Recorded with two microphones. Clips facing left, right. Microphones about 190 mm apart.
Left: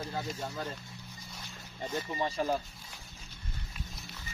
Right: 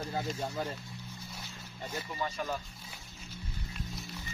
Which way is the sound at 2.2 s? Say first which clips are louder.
Left 4 dB; 35° left (ahead or behind).